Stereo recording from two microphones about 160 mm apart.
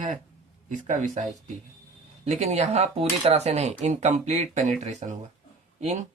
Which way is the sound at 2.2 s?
45° right (ahead or behind).